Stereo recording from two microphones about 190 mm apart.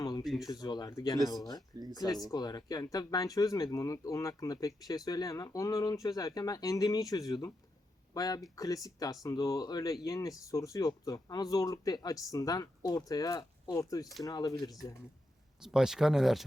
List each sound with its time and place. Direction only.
0.0 s a sound: 20° left (ahead or behind)
0.3 s speech: centre (ahead or behind)
0.5 s speech: 20° left (ahead or behind)
15.6 s speech: 5° right (ahead or behind)